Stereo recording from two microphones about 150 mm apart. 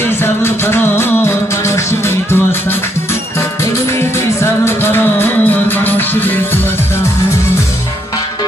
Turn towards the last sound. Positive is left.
turn(degrees=15)  # may be behind; listen again after turning